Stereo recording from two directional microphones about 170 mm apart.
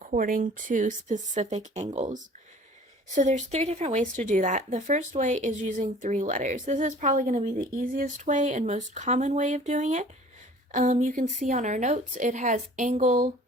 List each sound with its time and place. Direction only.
0.1 s speech: 50° right (ahead or behind)